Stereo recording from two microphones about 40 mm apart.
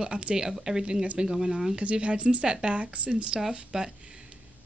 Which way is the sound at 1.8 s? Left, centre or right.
Right.